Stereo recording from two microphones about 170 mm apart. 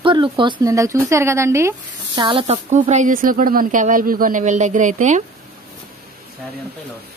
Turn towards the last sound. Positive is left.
turn(degrees=-45)  # may be behind; listen again after turning